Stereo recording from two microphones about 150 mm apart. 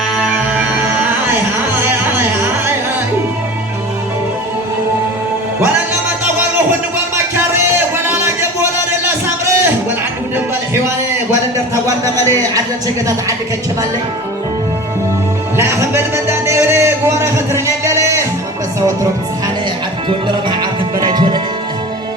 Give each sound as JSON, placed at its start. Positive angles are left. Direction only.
{"t": 0.2, "sound": "music", "side_deg": -10}
{"t": 8.0, "sound": "a sound", "side_deg": -15}
{"t": 9.2, "sound": "music", "side_deg": -15}
{"t": 11.5, "sound": "a sound", "side_deg": -20}
{"t": 15.5, "sound": "music", "side_deg": -15}
{"t": 20.1, "sound": "music", "side_deg": -30}